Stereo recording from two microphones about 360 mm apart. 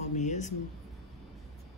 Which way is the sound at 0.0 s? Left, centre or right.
Centre.